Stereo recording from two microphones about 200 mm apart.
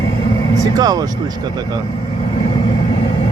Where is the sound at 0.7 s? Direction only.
20° right (ahead or behind).